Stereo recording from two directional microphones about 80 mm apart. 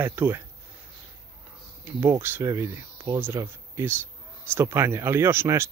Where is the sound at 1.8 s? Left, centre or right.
Right.